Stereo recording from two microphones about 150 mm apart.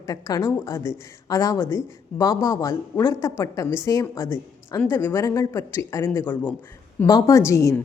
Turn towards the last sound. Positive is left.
turn(degrees=20)  # may be behind; listen again after turning